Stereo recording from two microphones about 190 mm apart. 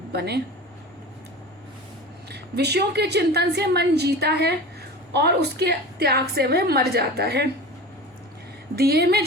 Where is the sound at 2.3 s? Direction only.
60° right (ahead or behind).